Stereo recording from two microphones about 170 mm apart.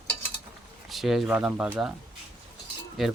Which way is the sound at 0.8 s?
Centre (ahead or behind).